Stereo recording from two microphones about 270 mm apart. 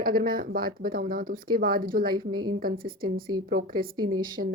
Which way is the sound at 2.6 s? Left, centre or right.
Right.